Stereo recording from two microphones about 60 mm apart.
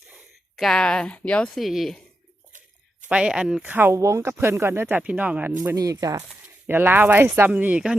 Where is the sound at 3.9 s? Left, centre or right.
Right.